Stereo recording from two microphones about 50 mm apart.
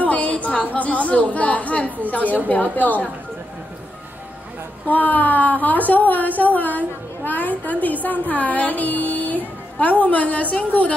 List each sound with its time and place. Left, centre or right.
0.0 s a sound: left
0.7 s speech: left
4.8 s speech: left